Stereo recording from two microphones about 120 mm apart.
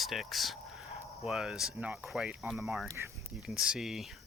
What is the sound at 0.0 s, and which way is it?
Speech, centre (ahead or behind).